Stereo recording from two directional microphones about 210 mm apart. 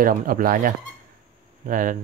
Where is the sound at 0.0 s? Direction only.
40° right (ahead or behind).